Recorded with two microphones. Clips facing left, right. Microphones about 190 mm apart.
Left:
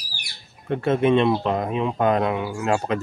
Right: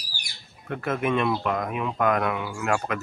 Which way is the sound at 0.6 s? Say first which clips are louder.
Left 7 dB; 30° left (ahead or behind).